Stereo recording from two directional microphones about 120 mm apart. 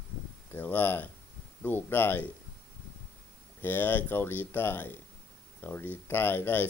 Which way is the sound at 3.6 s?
15° left (ahead or behind).